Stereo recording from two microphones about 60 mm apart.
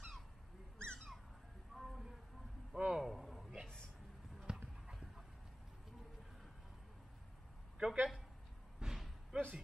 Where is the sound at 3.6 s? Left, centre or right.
Centre.